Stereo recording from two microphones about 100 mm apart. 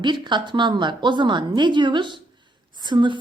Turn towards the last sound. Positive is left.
turn(degrees=-50)  # may be behind; listen again after turning